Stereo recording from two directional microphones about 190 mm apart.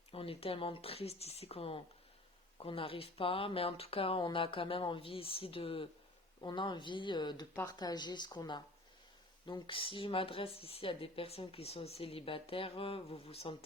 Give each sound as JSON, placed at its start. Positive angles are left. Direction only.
{"t": 0.1, "sound": "speech", "side_deg": 30}